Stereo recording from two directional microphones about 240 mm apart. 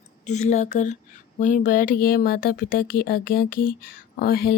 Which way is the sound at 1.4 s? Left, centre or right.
Left.